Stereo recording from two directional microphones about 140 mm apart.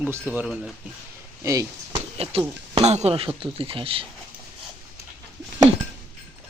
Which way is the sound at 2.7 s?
50° right (ahead or behind).